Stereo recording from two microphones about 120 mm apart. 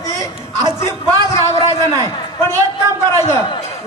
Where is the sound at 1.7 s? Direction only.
25° left (ahead or behind).